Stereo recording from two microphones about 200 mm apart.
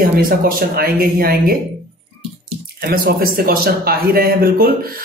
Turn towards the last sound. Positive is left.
turn(degrees=-50)  # may be behind; listen again after turning